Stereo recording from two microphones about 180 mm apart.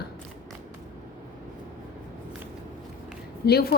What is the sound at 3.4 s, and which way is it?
Speech, 60° left (ahead or behind).